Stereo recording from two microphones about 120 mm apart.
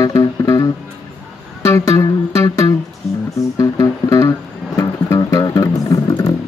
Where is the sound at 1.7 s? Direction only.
25° left (ahead or behind).